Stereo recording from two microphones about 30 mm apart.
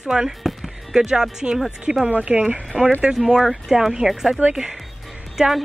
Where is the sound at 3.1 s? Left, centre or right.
Centre.